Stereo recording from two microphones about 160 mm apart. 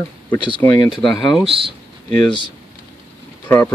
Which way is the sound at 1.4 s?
35° right (ahead or behind).